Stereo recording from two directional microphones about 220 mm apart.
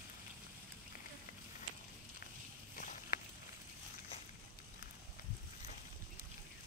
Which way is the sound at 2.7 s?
35° left (ahead or behind).